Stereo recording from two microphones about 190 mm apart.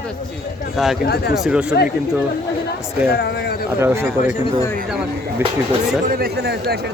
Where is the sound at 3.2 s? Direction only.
60° left (ahead or behind).